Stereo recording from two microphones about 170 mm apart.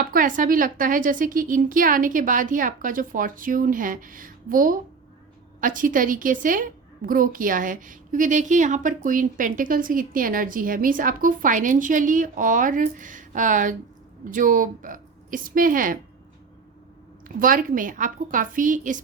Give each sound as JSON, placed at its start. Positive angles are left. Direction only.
{"t": 0.0, "sound": "a woman's voice", "side_deg": -55}
{"t": 17.2, "sound": "a woman's voice", "side_deg": -55}